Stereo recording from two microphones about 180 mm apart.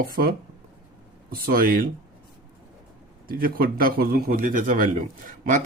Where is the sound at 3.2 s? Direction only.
55° right (ahead or behind).